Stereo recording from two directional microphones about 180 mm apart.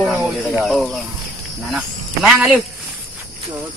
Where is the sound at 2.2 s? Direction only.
5° right (ahead or behind).